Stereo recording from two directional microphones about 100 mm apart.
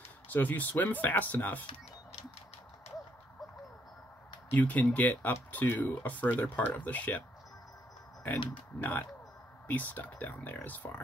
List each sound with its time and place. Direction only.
0.3 s speech: 20° left (ahead or behind)
4.5 s speech: 15° left (ahead or behind)
8.3 s speech: 15° left (ahead or behind)